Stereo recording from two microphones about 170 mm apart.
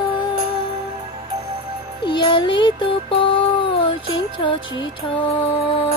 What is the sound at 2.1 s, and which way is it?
Music, 30° left (ahead or behind).